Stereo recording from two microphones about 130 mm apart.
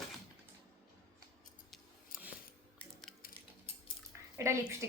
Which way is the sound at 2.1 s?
90° left.